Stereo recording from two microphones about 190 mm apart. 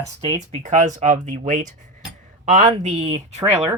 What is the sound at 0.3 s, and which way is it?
Speech, 40° right (ahead or behind).